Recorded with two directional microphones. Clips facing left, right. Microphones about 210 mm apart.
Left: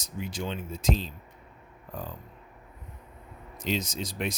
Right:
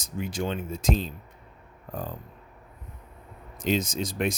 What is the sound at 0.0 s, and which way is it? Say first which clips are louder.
Speech: right 4 dB; 50° right (ahead or behind).